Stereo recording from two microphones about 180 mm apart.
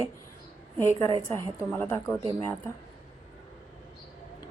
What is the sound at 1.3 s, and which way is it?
Speech, 10° left (ahead or behind).